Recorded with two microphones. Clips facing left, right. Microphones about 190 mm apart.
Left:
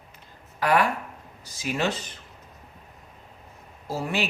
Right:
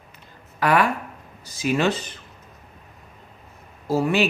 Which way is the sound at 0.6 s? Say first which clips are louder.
Right 2 dB; 70° right (ahead or behind).